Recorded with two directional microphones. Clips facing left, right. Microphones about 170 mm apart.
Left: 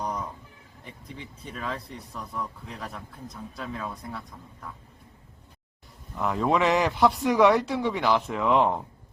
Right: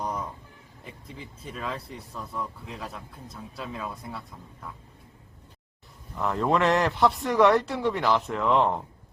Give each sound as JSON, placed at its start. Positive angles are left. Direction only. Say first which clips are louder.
{"t": 0.0, "sound": "a sound", "louder": "even", "side_deg": -5}
{"t": 1.1, "sound": "speech", "louder": "even", "side_deg": 0}
{"t": 6.1, "sound": "speech", "louder": "even", "side_deg": 0}